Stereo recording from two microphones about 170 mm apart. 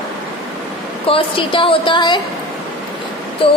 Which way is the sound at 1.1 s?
30° left (ahead or behind).